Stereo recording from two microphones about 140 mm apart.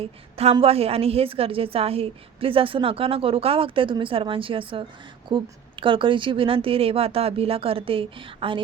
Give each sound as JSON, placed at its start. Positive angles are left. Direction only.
{"t": 0.0, "sound": "a woman's voice", "side_deg": -45}